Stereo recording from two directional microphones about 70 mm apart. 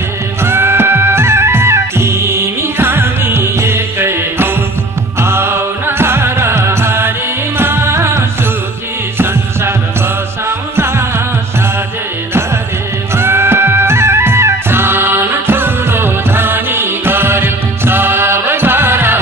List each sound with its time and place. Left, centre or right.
0.4 s music: right
9.2 s music: right
10.8 s music: right
13.1 s music: right